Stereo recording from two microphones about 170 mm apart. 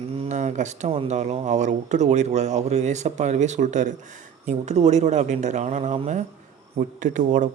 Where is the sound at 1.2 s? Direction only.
40° right (ahead or behind).